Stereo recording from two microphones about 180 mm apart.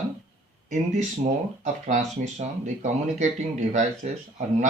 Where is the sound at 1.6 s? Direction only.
40° right (ahead or behind).